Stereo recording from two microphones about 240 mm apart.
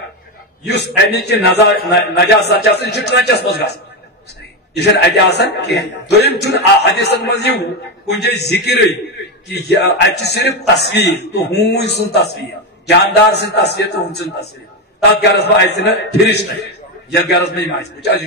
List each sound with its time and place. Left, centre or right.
0.7 s a man's voice: left
4.7 s a man's voice: left